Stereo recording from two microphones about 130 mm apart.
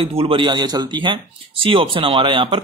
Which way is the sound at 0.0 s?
45° right (ahead or behind).